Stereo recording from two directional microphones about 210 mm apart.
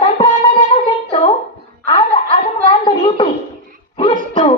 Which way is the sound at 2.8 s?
25° left (ahead or behind).